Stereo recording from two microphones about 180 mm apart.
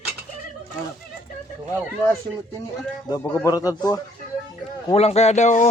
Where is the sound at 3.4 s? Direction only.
20° left (ahead or behind).